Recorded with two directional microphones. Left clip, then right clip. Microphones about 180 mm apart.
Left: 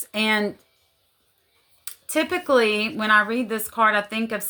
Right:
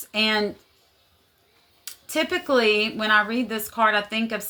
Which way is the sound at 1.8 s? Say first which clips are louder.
Left 1 dB; 40° left (ahead or behind).